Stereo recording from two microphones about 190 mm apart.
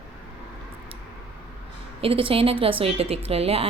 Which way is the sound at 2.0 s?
30° right (ahead or behind).